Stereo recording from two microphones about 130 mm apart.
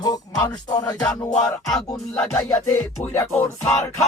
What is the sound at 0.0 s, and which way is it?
Music, 30° left (ahead or behind).